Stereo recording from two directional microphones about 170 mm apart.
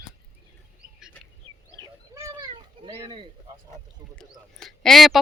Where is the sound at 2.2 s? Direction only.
20° right (ahead or behind).